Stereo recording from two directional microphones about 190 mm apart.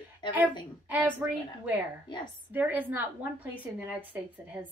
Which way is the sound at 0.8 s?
10° right (ahead or behind).